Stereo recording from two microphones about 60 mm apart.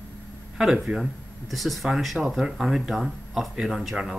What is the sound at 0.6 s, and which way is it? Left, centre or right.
Speech, centre.